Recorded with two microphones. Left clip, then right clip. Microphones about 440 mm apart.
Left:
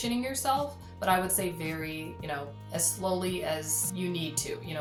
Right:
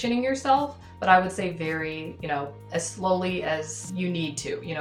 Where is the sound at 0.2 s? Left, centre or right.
Left.